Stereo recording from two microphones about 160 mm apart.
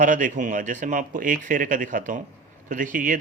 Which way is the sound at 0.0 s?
55° right (ahead or behind).